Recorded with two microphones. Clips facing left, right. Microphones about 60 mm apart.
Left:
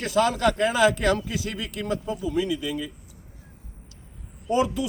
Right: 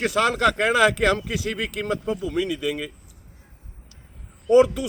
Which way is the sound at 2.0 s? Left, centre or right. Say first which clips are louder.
Left 1 dB; right.